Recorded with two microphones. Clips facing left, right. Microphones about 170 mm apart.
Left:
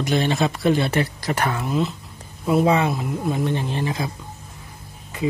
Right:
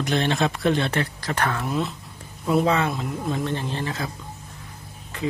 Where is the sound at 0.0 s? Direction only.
Centre (ahead or behind).